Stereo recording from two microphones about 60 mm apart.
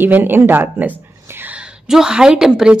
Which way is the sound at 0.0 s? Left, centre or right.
Right.